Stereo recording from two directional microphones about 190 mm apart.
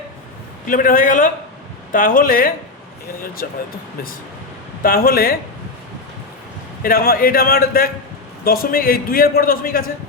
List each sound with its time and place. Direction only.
0.7 s a man's voice: 45° left (ahead or behind)
4.8 s a man's voice: 50° left (ahead or behind)
6.8 s a man's voice: 50° left (ahead or behind)